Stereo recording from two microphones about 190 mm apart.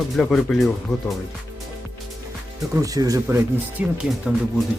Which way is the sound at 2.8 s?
20° right (ahead or behind).